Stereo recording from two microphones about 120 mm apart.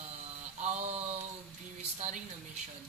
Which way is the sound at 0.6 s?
65° right (ahead or behind).